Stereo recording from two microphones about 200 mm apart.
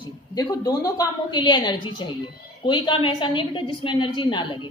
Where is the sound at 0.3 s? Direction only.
20° left (ahead or behind).